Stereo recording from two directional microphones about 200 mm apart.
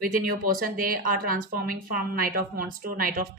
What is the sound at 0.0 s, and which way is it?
Speech, 45° right (ahead or behind).